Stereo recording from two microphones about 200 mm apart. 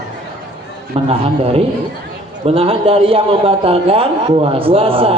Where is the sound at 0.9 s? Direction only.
30° right (ahead or behind).